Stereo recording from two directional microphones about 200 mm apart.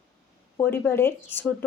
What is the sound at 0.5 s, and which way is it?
Speech, 10° left (ahead or behind).